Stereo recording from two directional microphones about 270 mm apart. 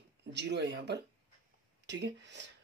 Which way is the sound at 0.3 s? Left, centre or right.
Right.